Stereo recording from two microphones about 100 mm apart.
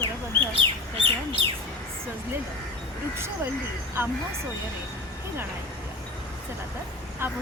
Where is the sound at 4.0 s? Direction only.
20° right (ahead or behind).